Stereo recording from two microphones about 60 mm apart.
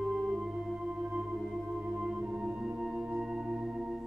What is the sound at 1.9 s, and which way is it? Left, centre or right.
Singing bowl, centre.